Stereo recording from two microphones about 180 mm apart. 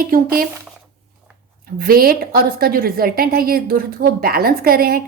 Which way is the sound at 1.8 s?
55° right (ahead or behind).